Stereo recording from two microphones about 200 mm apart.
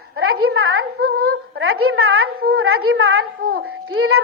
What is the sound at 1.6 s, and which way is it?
A woman's voice, 90° right.